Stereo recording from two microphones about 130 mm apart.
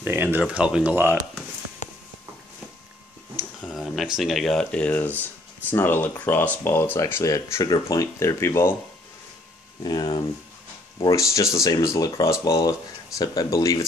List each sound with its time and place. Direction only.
0.0 s speech: 15° right (ahead or behind)
3.6 s speech: centre (ahead or behind); by 8.7 s 20° left (ahead or behind)
9.8 s speech: 30° left (ahead or behind)